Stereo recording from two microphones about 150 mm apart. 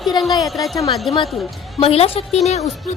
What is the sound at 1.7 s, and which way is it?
Speech, 40° left (ahead or behind).